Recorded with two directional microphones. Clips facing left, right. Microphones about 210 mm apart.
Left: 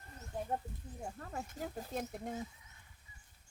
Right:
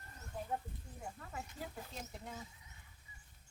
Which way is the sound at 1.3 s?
45° left (ahead or behind).